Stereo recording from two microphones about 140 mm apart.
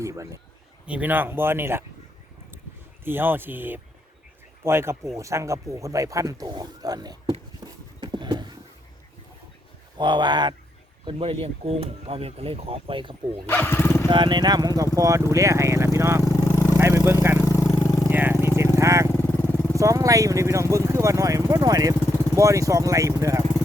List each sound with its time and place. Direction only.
0.0 s speech: 20° right (ahead or behind)
0.9 s speech: 10° right (ahead or behind)
3.0 s speech: 15° right (ahead or behind)
7.6 s a sound: 35° right (ahead or behind)
10.0 s speech: 35° right (ahead or behind)
13.5 s speech: 15° left (ahead or behind)
14.1 s speech: 35° right (ahead or behind)
16.2 s vehicle: 25° left (ahead or behind)
16.7 s vehicle: 20° right (ahead or behind)
17.4 s vehicle: 20° left (ahead or behind)
18.1 s vehicle: 15° right (ahead or behind)
19.1 s vehicle: 15° left (ahead or behind)
19.7 s speech: 25° right (ahead or behind)